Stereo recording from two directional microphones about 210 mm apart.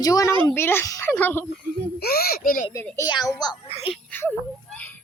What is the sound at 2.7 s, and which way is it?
Speech, 15° left (ahead or behind).